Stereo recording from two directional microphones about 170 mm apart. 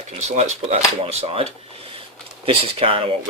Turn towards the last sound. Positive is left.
turn(degrees=-35)  # may be behind; listen again after turning